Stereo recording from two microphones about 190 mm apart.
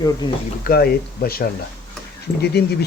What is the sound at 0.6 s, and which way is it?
Speech, 55° left (ahead or behind).